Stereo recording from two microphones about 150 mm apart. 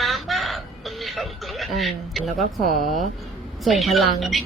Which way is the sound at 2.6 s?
75° left (ahead or behind).